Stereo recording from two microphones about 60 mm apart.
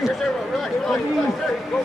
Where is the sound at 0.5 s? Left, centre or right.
Centre.